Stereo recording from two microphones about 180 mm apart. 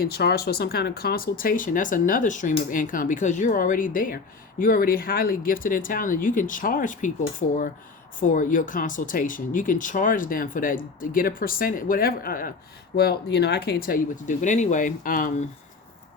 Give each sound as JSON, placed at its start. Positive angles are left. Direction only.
{"t": 0.0, "sound": "speech", "side_deg": 60}
{"t": 13.0, "sound": "speech", "side_deg": 65}